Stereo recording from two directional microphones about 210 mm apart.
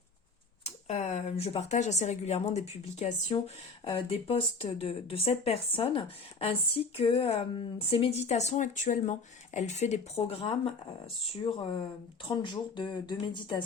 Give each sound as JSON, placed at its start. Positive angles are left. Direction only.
{"t": 0.6, "sound": "a woman's voice", "side_deg": 30}